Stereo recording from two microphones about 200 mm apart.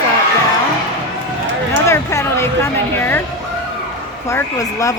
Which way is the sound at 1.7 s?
15° left (ahead or behind).